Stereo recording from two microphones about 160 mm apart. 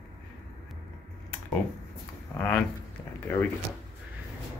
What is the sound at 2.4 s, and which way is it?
Speech, 5° left (ahead or behind).